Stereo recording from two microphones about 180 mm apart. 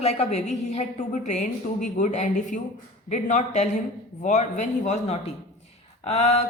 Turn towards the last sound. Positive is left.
turn(degrees=40)  # may be behind; listen again after turning